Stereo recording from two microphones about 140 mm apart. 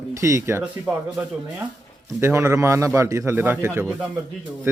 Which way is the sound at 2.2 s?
20° right (ahead or behind).